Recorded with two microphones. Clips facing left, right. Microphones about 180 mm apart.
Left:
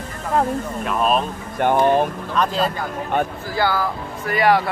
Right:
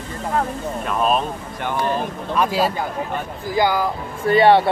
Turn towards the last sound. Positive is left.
turn(degrees=-30)  # may be behind; listen again after turning